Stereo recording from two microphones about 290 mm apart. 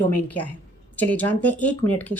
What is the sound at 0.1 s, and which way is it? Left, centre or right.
Speech, centre.